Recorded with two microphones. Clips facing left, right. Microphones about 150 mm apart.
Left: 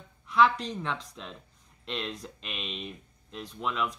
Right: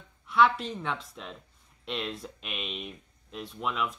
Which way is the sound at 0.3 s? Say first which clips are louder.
Even; centre (ahead or behind).